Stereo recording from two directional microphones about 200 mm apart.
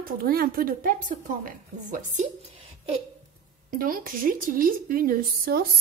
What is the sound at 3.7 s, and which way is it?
A woman's voice, 45° right (ahead or behind).